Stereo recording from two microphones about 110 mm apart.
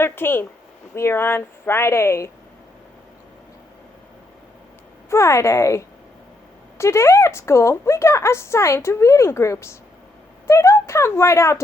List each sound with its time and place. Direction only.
0.0 s a woman's voice: 20° left (ahead or behind)
5.0 s a woman's voice: 25° left (ahead or behind)